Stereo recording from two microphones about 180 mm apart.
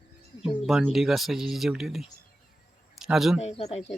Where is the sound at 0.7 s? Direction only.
Centre (ahead or behind).